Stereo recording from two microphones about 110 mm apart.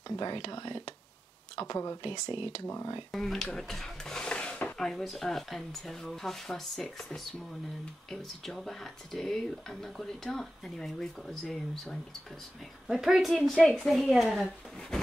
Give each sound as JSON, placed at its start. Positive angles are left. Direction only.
{"t": 0.1, "sound": "speech", "side_deg": 40}
{"t": 2.6, "sound": "speech", "side_deg": 25}
{"t": 3.1, "sound": "speech", "side_deg": 0}